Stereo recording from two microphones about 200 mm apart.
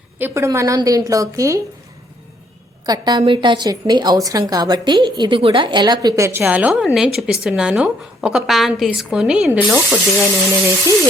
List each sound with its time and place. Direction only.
0.2 s a woman's voice: 10° right (ahead or behind)
2.8 s a woman's voice: 20° right (ahead or behind)